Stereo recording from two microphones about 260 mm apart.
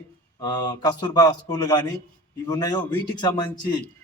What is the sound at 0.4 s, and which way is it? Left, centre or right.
A man's voice, centre.